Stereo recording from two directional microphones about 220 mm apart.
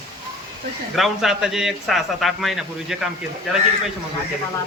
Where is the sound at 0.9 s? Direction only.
Centre (ahead or behind).